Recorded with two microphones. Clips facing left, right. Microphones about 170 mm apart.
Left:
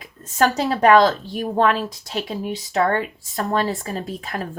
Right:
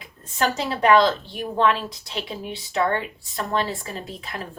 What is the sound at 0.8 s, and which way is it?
Speech, 45° left (ahead or behind).